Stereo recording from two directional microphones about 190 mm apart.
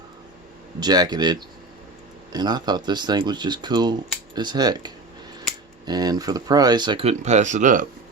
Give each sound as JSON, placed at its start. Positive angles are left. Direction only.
{"t": 0.8, "sound": "speech", "side_deg": -20}